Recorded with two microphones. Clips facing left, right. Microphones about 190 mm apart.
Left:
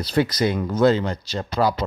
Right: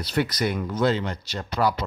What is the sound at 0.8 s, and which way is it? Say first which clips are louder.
Speech: left 6 dB; 40° left (ahead or behind).